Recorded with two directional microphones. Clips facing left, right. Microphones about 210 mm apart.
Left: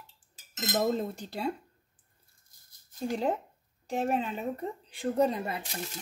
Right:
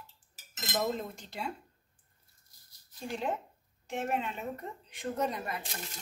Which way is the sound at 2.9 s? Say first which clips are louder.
Left 5 dB; 45° left (ahead or behind).